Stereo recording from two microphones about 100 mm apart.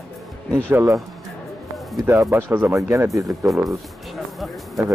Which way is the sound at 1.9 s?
35° right (ahead or behind).